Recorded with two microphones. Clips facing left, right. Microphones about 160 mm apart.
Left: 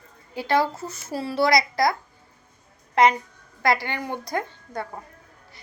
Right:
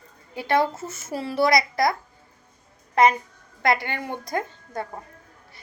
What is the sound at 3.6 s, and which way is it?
A woman's voice, 25° right (ahead or behind).